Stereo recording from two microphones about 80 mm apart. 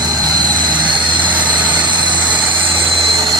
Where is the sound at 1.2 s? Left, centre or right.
Centre.